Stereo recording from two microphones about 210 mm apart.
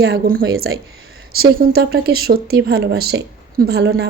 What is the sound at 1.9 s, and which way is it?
Speech, 45° right (ahead or behind).